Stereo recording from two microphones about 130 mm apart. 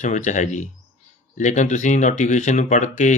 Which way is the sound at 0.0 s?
65° left (ahead or behind).